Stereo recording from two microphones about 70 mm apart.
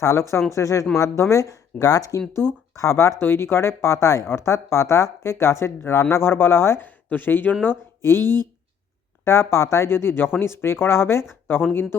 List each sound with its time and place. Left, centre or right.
0.0 s speech: left
2.3 s speech: left
6.8 s speech: left
8.2 s speech: right
9.2 s speech: left